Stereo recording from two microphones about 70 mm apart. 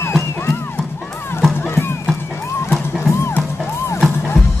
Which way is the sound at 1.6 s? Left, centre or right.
Left.